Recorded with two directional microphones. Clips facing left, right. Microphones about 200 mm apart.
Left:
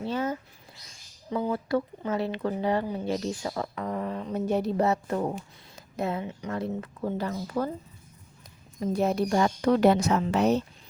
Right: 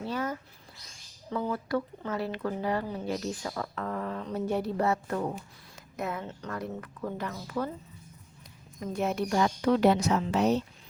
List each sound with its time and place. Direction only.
0.0 s a sound: 25° left (ahead or behind)
1.3 s speech: 20° left (ahead or behind)
3.8 s mantra: 15° left (ahead or behind)
4.4 s speech: 20° left (ahead or behind); by 7.7 s 35° left (ahead or behind)
8.8 s speech: 35° left (ahead or behind); by 10.6 s 55° left (ahead or behind)